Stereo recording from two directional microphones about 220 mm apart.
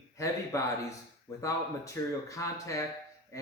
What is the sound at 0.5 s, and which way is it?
Speech, 15° left (ahead or behind).